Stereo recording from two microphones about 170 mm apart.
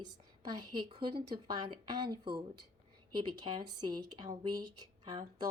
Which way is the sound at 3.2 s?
25° right (ahead or behind).